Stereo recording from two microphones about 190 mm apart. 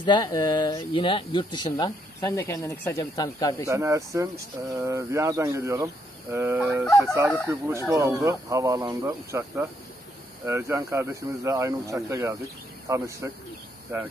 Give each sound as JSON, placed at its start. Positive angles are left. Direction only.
{"t": 0.0, "sound": "speech", "side_deg": 25}
{"t": 2.2, "sound": "speech", "side_deg": 10}
{"t": 3.6, "sound": "speech", "side_deg": -15}